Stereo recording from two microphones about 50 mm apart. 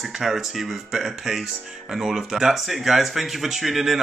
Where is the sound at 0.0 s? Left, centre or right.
Centre.